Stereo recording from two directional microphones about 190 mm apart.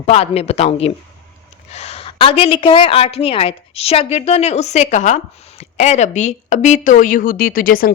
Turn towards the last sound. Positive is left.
turn(degrees=50)  # may be behind; listen again after turning